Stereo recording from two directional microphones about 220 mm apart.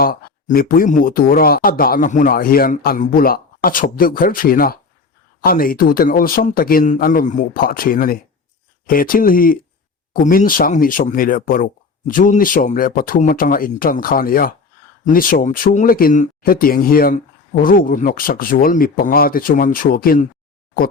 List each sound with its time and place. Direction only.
0.0 s speech: 40° left (ahead or behind)